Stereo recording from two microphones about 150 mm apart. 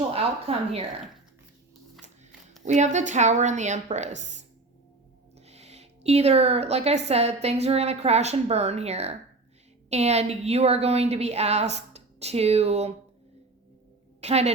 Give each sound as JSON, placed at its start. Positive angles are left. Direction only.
{"t": 0.1, "sound": "a woman's voice", "side_deg": -40}
{"t": 2.6, "sound": "a woman's voice", "side_deg": -50}
{"t": 5.5, "sound": "a woman's voice", "side_deg": -45}
{"t": 14.2, "sound": "a woman's voice", "side_deg": -45}